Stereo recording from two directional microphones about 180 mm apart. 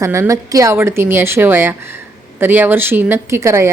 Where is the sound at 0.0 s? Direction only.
15° right (ahead or behind).